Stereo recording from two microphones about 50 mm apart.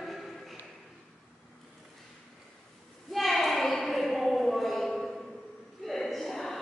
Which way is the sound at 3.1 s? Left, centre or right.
Centre.